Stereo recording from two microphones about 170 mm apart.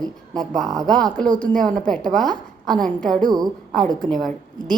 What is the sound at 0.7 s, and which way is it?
Speech, 25° right (ahead or behind).